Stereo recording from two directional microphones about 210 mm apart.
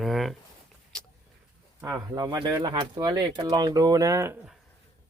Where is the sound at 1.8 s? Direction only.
15° right (ahead or behind).